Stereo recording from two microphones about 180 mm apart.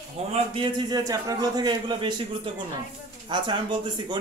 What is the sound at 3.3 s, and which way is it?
Speech, 25° right (ahead or behind).